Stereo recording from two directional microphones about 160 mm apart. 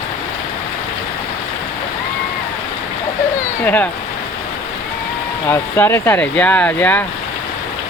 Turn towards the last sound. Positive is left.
turn(degrees=10)  # may be behind; listen again after turning